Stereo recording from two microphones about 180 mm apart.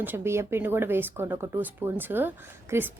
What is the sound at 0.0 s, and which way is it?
Speech, 10° right (ahead or behind).